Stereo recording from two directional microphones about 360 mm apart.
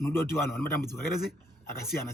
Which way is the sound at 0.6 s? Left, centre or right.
Left.